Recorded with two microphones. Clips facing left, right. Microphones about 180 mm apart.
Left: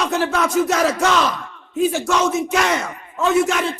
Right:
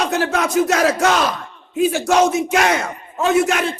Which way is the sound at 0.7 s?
75° right (ahead or behind).